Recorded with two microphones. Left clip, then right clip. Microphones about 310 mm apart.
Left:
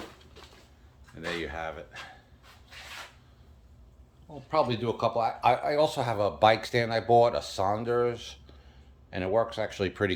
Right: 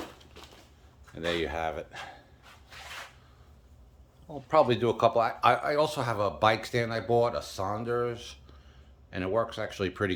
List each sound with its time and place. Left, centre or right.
1.1 s speech: right
4.4 s a man's voice: centre